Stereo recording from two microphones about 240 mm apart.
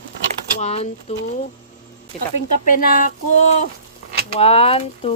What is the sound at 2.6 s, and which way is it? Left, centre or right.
Speech, left.